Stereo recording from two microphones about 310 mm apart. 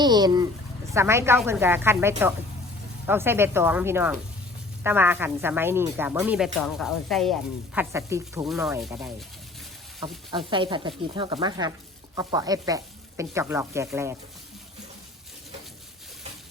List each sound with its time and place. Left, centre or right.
0.0 s sizzle: centre
4.8 s a woman's voice: centre
10.3 s sizzle: centre